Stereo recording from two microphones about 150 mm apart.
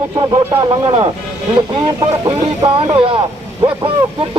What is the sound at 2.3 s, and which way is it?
Speech, 30° right (ahead or behind).